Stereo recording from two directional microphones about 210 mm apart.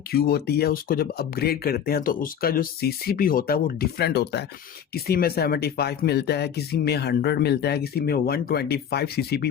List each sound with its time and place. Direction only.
0.1 s speech: 45° left (ahead or behind)